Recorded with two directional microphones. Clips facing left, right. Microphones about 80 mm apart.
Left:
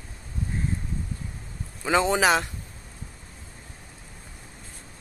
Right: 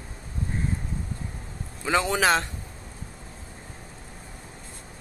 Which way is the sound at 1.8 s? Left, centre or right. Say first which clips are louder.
Left 2 dB; left.